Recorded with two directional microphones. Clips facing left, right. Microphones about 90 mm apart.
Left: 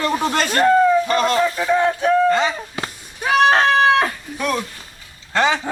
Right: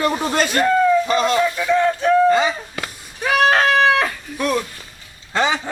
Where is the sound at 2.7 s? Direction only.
25° left (ahead or behind).